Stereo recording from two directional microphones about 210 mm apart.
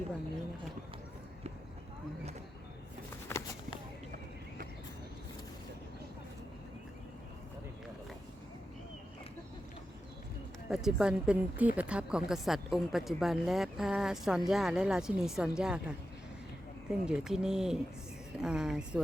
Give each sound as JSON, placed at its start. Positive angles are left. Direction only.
{"t": 3.3, "sound": "a sound", "side_deg": 10}
{"t": 10.7, "sound": "a woman's voice", "side_deg": 0}
{"t": 17.1, "sound": "a woman's voice", "side_deg": -5}